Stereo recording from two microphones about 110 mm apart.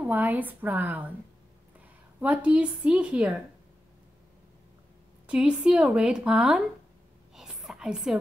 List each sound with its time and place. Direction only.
0.0 s a woman's voice: 15° right (ahead or behind)
2.1 s a woman's voice: 10° right (ahead or behind)
5.2 s a woman's voice: 10° right (ahead or behind)
7.3 s a sound: 5° right (ahead or behind)